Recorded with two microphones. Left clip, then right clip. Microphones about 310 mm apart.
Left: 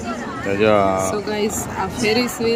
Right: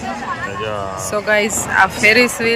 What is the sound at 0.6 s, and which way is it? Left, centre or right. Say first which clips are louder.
Speech: left 7 dB; left.